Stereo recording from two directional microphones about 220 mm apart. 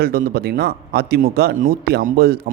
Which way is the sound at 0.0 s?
40° right (ahead or behind).